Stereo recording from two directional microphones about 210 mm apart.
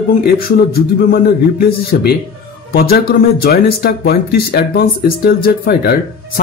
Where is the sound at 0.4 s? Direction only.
45° left (ahead or behind).